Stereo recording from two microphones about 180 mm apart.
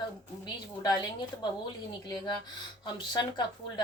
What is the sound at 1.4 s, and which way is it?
A woman's voice, 25° left (ahead or behind).